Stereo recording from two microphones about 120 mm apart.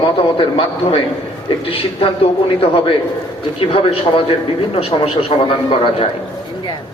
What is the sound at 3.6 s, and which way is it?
A man's voice, 50° left (ahead or behind).